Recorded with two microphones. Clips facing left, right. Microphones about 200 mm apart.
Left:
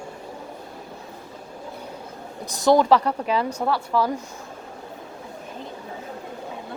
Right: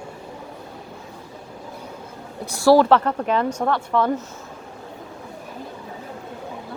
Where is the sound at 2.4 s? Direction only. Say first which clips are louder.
Right 3 dB; 15° left (ahead or behind).